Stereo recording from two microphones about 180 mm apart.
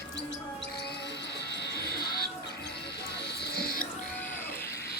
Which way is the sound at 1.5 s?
70° left (ahead or behind).